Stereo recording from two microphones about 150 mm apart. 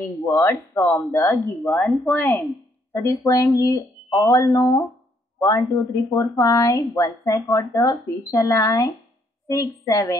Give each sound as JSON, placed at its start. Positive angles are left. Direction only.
{"t": 0.2, "sound": "speech", "side_deg": 20}